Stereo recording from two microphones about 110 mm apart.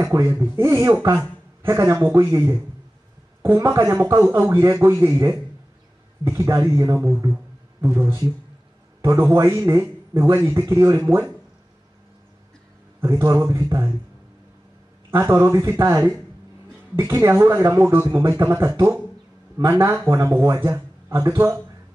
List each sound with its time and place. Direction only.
0.0 s a man's voice: 25° right (ahead or behind)
7.3 s a sound: 20° right (ahead or behind)
9.0 s a man's voice: 25° right (ahead or behind)
13.0 s a man's voice: 25° right (ahead or behind)
15.0 s a man's voice: 25° right (ahead or behind)